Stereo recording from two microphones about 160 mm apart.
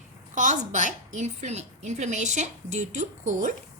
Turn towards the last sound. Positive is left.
turn(degrees=-50)  # may be behind; listen again after turning